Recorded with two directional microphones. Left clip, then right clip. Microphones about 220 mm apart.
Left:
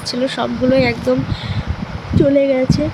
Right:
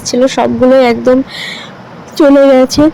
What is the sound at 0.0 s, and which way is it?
Speech, 25° right (ahead or behind).